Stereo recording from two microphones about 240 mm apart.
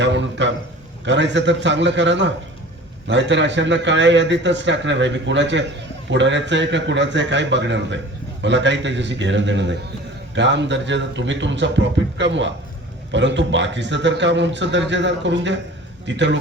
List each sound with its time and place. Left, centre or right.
0.0 s a man's voice: right